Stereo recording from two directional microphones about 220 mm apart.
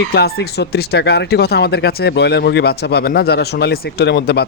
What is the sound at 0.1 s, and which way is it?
Speech, 45° left (ahead or behind).